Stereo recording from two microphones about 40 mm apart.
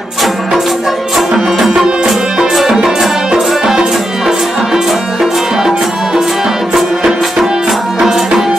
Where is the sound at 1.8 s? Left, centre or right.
Right.